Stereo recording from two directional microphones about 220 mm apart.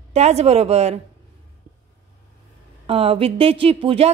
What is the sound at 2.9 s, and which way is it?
A woman's voice, 25° right (ahead or behind).